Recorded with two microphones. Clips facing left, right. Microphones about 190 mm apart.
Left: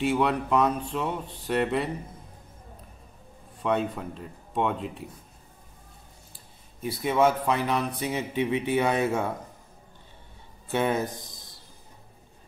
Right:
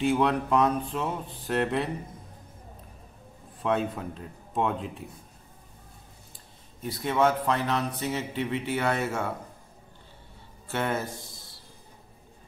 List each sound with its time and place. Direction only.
0.0 s speech: centre (ahead or behind)
3.6 s speech: centre (ahead or behind)
6.3 s speech: 10° left (ahead or behind)
10.7 s speech: 15° left (ahead or behind)